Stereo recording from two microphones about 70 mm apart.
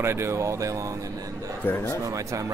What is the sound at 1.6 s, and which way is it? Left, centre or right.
Speech, left.